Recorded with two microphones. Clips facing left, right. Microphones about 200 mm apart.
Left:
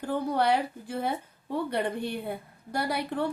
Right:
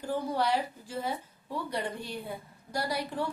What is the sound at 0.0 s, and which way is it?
A woman's voice, 60° left (ahead or behind).